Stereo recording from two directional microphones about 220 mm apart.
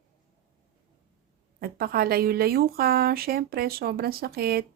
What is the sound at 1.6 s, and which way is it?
Speech, 45° right (ahead or behind).